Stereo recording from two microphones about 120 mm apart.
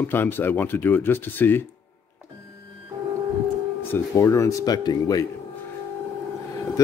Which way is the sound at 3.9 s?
25° left (ahead or behind).